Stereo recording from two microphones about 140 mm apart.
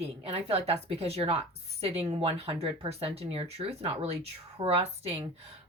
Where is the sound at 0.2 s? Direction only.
45° right (ahead or behind).